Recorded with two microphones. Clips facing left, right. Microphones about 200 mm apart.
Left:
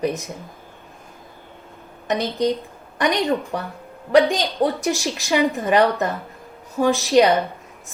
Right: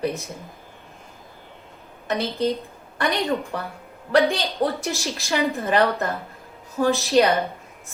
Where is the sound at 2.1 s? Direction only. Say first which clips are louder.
Left 2 dB; 15° left (ahead or behind).